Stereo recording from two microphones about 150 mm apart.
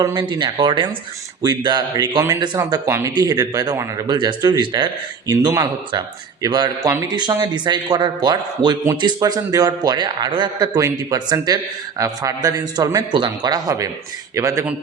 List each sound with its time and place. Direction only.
0.0 s a man's voice: 25° right (ahead or behind)